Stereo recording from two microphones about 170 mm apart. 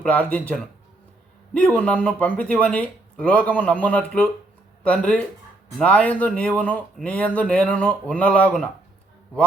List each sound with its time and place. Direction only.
0.0 s speech: 10° left (ahead or behind)